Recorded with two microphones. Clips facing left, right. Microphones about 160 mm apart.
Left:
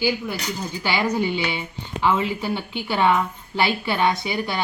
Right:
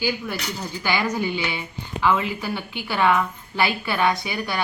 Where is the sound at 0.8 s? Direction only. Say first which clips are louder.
Left 1 dB; 20° left (ahead or behind).